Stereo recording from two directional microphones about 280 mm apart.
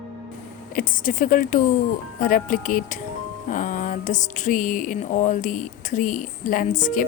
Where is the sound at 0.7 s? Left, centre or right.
Left.